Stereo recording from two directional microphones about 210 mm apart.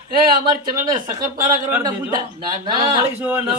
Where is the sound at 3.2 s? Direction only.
10° right (ahead or behind).